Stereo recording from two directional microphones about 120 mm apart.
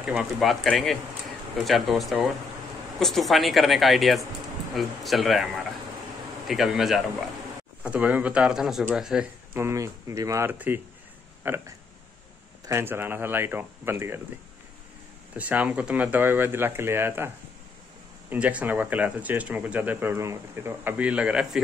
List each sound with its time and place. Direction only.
0.0 s speech: 10° right (ahead or behind)
9.6 s speech: 25° right (ahead or behind)
10.5 s speech: 15° right (ahead or behind)
15.3 s speech: 10° right (ahead or behind)
18.3 s speech: 10° right (ahead or behind)